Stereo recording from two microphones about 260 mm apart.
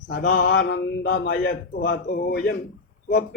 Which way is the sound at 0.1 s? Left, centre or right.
Left.